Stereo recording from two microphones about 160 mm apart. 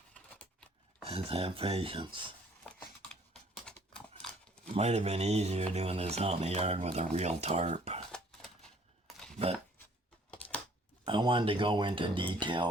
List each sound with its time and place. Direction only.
0.1 s scissors: 10° left (ahead or behind)
1.0 s speech: 35° right (ahead or behind)
3.7 s typewriter: 5° left (ahead or behind)
4.7 s speech: 40° right (ahead or behind)
8.1 s a sound: 5° left (ahead or behind)
10.3 s a sound: 10° left (ahead or behind)
11.0 s speech: 30° right (ahead or behind)